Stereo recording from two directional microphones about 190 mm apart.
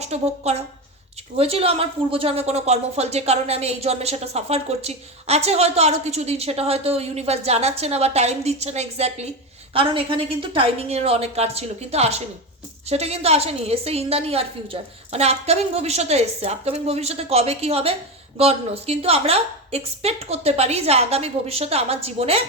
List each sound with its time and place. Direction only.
0.0 s a woman's voice: 35° right (ahead or behind)